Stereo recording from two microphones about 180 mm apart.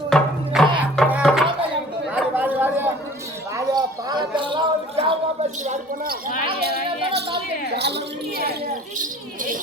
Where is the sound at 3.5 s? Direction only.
20° right (ahead or behind); by 6.2 s 50° right (ahead or behind).